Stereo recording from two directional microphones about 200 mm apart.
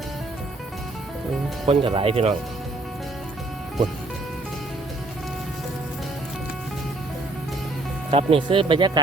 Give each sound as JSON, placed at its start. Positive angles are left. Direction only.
{"t": 1.6, "sound": "speech", "side_deg": -25}
{"t": 8.1, "sound": "speech", "side_deg": -25}